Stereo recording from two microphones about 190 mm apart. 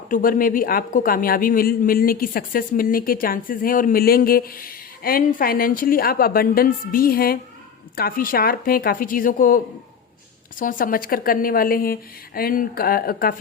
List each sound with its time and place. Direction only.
0.1 s speech: 45° left (ahead or behind)
10.6 s speech: 45° left (ahead or behind)